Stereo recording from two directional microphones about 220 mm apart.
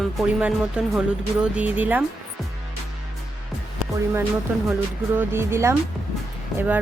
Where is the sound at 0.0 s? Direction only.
Centre (ahead or behind).